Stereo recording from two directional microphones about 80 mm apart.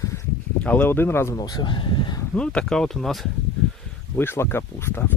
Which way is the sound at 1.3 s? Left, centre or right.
Left.